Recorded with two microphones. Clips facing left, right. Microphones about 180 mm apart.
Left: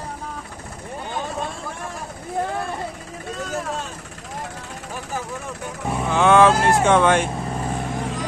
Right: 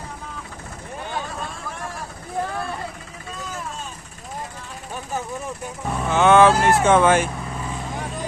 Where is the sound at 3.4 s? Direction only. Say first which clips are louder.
Left 5 dB; 75° left (ahead or behind).